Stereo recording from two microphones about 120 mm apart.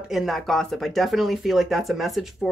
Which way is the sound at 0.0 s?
Centre (ahead or behind).